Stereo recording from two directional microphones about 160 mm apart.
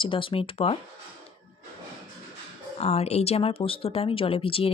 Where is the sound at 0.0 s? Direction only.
35° left (ahead or behind).